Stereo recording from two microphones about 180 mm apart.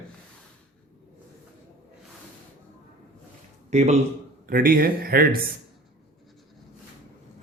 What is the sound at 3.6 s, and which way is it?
Speech, 40° right (ahead or behind).